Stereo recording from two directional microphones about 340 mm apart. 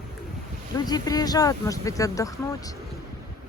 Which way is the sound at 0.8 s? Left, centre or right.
Centre.